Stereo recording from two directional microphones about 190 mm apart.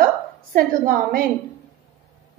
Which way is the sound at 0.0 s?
50° right (ahead or behind).